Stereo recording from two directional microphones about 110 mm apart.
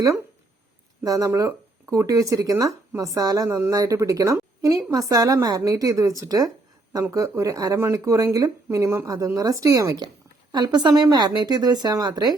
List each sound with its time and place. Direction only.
1.0 s a woman's voice: 30° right (ahead or behind)